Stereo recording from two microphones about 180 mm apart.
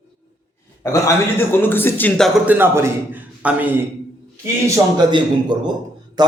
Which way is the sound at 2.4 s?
10° right (ahead or behind).